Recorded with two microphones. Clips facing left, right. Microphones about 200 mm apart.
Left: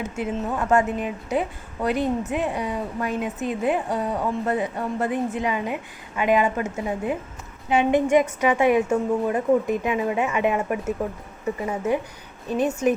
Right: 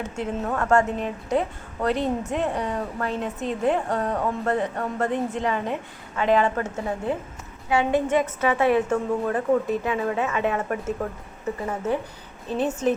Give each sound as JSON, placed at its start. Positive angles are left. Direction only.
{"t": 0.0, "sound": "a woman's voice", "side_deg": 10}